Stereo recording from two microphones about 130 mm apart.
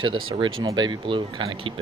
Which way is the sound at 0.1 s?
40° right (ahead or behind).